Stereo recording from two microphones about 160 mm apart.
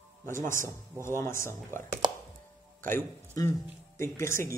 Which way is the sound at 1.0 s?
15° left (ahead or behind).